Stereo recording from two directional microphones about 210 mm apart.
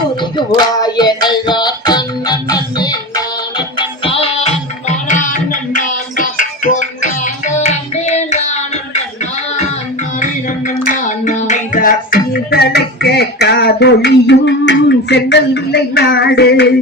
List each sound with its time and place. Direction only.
0.2 s music: 20° left (ahead or behind)
10.8 s music: 35° left (ahead or behind); by 16.7 s 50° left (ahead or behind)